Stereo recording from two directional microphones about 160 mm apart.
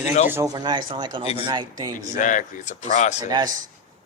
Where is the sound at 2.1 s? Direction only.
50° left (ahead or behind).